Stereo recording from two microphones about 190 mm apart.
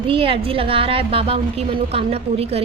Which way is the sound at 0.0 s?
30° right (ahead or behind).